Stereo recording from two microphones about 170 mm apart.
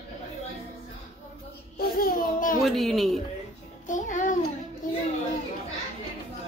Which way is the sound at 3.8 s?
50° left (ahead or behind).